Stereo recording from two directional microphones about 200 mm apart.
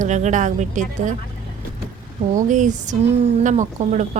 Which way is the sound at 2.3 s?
40° right (ahead or behind).